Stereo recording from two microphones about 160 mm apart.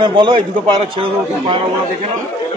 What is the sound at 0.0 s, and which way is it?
A man's voice, 30° right (ahead or behind).